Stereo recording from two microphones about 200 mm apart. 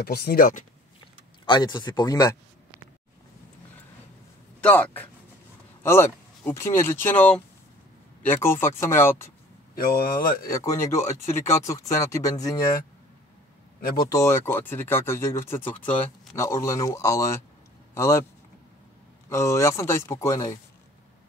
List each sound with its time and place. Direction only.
0.0 s speech: 50° left (ahead or behind)
1.4 s speech: 25° left (ahead or behind)
4.6 s speech: 5° left (ahead or behind)
9.8 s speech: 45° left (ahead or behind)
10.4 s speech: 15° left (ahead or behind)
14.0 s speech: 15° left (ahead or behind)
19.2 s speech: 15° left (ahead or behind)